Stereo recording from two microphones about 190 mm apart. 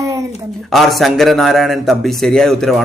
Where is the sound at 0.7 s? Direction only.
Centre (ahead or behind).